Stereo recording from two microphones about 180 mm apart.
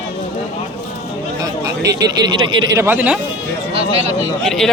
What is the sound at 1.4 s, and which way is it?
Speech, 20° right (ahead or behind).